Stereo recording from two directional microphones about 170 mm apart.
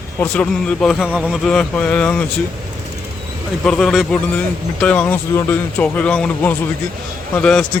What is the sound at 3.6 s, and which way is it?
A man's voice, 5° left (ahead or behind).